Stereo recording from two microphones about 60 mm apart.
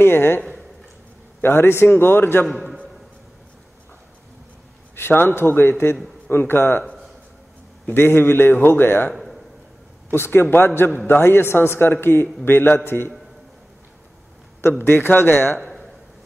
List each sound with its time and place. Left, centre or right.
0.0 s a man's voice: left
1.4 s a man's voice: left
4.9 s a man's voice: left
7.8 s a man's voice: left
9.1 s a sound: centre
10.1 s a man's voice: left
14.6 s a man's voice: left